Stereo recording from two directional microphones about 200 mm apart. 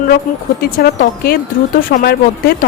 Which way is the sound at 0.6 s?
50° left (ahead or behind).